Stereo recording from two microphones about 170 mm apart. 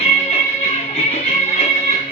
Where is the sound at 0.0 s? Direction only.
35° left (ahead or behind).